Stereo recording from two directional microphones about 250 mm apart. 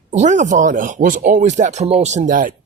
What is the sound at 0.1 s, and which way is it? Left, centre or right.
Speech, right.